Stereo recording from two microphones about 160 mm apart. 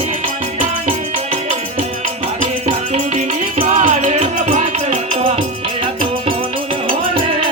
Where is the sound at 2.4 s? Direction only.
45° right (ahead or behind).